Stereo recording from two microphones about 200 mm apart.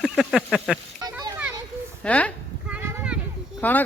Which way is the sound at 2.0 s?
5° left (ahead or behind).